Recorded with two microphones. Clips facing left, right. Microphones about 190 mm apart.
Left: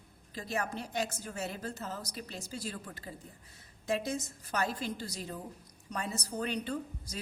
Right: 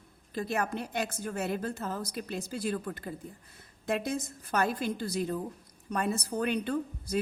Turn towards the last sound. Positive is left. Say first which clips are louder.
# right 7 dB
turn(degrees=-55)  # may be behind; listen again after turning